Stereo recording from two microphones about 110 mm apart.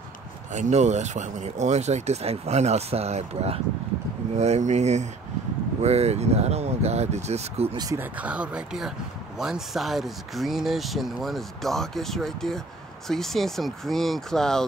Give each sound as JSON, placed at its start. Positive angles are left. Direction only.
{"t": 0.5, "sound": "speech", "side_deg": -90}
{"t": 4.4, "sound": "speech", "side_deg": -90}
{"t": 5.8, "sound": "speech", "side_deg": -75}
{"t": 7.7, "sound": "speech", "side_deg": -35}
{"t": 8.0, "sound": "speech", "side_deg": -10}